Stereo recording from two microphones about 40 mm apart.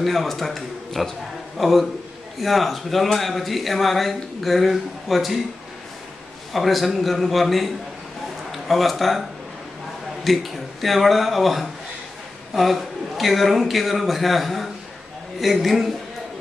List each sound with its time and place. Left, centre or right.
0.0 s speech: centre
6.5 s speech: centre
10.2 s a man's voice: centre